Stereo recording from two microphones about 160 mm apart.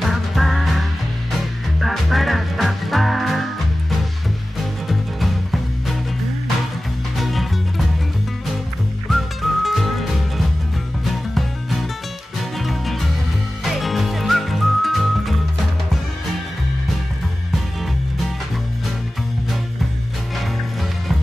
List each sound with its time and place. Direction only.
0.0 s music: centre (ahead or behind)
4.8 s music: centre (ahead or behind)
7.2 s music: centre (ahead or behind)
9.1 s music: centre (ahead or behind)